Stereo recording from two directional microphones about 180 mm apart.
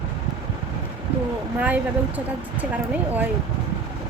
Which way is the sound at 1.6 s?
10° right (ahead or behind).